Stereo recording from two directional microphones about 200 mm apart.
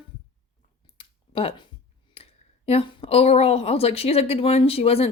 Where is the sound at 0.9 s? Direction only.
30° left (ahead or behind).